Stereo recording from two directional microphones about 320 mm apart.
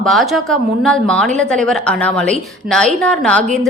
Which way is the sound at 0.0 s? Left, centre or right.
Centre.